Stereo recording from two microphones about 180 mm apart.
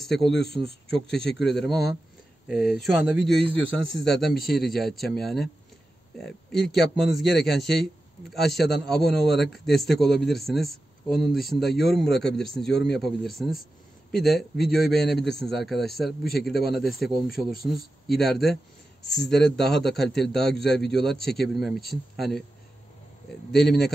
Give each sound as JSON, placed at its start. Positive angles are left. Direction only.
{"t": 0.0, "sound": "a man's voice", "side_deg": 0}
{"t": 0.5, "sound": "speech", "side_deg": -30}
{"t": 0.8, "sound": "a man's voice", "side_deg": 5}
{"t": 23.5, "sound": "a man's voice", "side_deg": 0}